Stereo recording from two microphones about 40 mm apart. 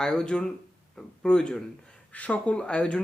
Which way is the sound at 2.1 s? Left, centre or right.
Left.